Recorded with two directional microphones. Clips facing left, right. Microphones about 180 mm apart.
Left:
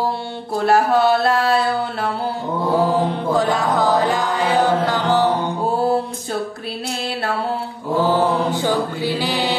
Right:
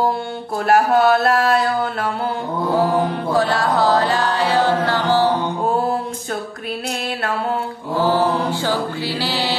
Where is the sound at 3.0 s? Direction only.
15° left (ahead or behind).